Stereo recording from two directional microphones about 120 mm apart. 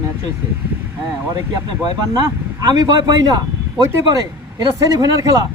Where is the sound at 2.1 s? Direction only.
35° right (ahead or behind).